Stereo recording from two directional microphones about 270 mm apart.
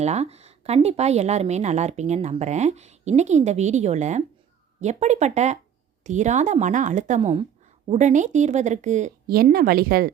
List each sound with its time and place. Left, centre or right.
0.0 s a woman's voice: right